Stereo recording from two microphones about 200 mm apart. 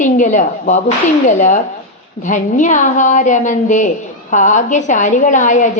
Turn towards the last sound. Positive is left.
turn(degrees=40)  # may be behind; listen again after turning